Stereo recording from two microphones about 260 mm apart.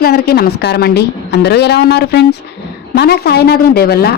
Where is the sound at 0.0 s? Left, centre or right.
Left.